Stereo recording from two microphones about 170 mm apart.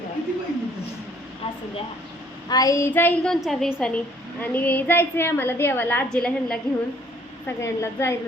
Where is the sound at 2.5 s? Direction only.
20° left (ahead or behind).